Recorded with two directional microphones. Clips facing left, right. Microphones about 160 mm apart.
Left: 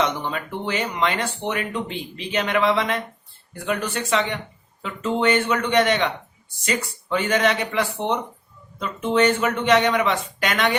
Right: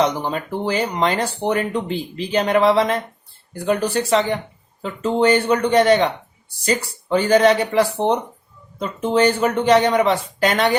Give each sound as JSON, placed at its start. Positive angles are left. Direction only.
{"t": 0.0, "sound": "speech", "side_deg": -35}